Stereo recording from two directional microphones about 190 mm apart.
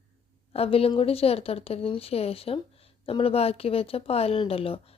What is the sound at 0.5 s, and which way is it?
Speech, 30° left (ahead or behind).